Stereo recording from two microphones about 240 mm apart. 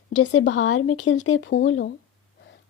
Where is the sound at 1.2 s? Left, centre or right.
Left.